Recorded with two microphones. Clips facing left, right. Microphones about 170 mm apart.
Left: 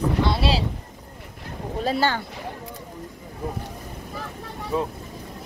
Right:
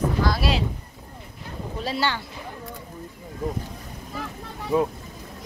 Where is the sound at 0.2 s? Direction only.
25° left (ahead or behind).